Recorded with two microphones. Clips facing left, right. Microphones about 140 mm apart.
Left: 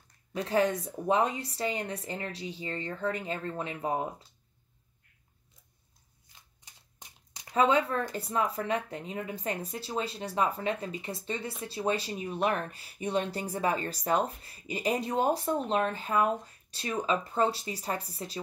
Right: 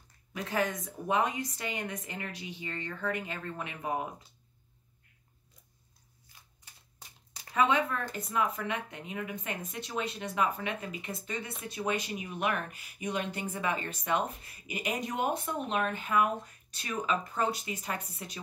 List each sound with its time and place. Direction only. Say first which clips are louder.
0.3 s speech: left 5 dB; 30° left (ahead or behind)
6.2 s a sound: even; 20° left (ahead or behind)
7.5 s speech: left 3 dB; 30° left (ahead or behind)